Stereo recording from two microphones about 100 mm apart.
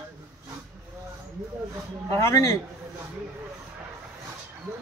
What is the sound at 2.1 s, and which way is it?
Speech, 30° left (ahead or behind).